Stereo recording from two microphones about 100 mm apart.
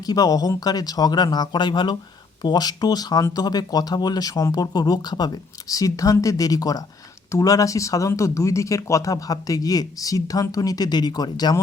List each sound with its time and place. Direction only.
0.0 s speech: 40° left (ahead or behind)